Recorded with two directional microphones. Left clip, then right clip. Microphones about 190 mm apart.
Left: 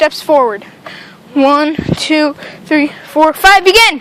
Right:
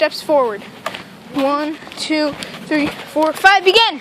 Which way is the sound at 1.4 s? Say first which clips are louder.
Left 9 dB; 55° left (ahead or behind).